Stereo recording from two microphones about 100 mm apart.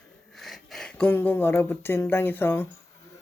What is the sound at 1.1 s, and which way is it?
Speech, 20° left (ahead or behind).